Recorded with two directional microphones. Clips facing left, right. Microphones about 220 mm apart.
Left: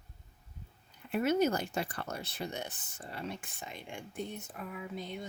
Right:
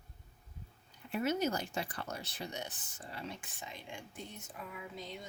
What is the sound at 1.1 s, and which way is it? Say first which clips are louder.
Speech: left 5 dB; 55° left (ahead or behind).